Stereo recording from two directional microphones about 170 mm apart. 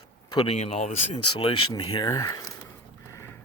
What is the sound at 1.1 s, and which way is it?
Speech, 30° left (ahead or behind).